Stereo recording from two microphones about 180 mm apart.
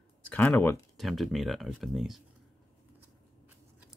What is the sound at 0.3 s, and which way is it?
Speech, 10° left (ahead or behind).